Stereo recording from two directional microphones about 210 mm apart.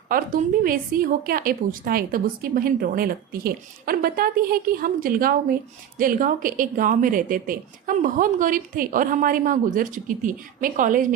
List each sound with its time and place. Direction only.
0.1 s a woman's voice: 40° right (ahead or behind)